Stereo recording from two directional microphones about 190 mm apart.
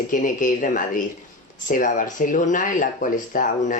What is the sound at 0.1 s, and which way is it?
Speech, 45° left (ahead or behind).